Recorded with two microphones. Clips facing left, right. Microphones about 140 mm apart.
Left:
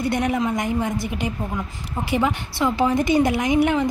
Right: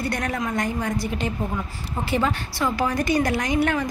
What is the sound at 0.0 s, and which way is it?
A woman's voice, 20° left (ahead or behind).